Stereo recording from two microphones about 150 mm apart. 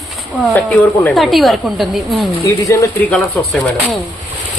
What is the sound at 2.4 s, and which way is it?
Speech, 20° left (ahead or behind).